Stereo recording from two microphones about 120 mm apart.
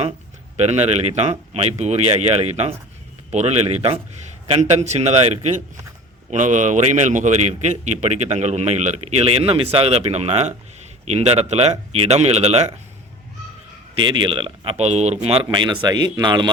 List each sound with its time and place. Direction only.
0.5 s a man's voice: 65° right (ahead or behind)
6.3 s a man's voice: 90° right; by 12.7 s 65° right (ahead or behind)
13.9 s speech: 45° right (ahead or behind)
15.5 s speech: 40° right (ahead or behind)